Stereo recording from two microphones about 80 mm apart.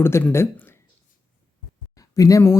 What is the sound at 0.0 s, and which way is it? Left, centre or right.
Speech, left.